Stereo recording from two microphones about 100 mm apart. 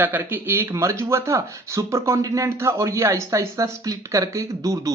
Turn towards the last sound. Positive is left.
turn(degrees=-35)  # may be behind; listen again after turning